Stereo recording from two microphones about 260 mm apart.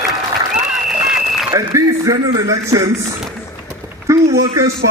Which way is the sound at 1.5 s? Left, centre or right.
Centre.